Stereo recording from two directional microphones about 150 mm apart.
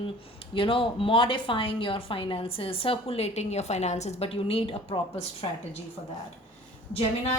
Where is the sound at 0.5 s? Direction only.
35° left (ahead or behind).